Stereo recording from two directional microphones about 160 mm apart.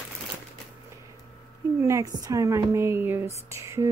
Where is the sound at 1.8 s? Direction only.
20° right (ahead or behind).